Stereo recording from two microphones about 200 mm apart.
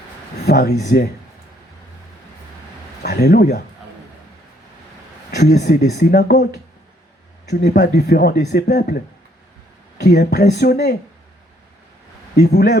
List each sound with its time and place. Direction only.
0.4 s speech: 55° left (ahead or behind)
3.0 s speech: 55° left (ahead or behind)
5.3 s speech: 55° left (ahead or behind)
10.0 s speech: 55° left (ahead or behind)
12.4 s speech: 55° left (ahead or behind)